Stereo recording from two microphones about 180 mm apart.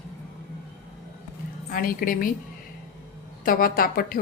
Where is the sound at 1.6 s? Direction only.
55° left (ahead or behind).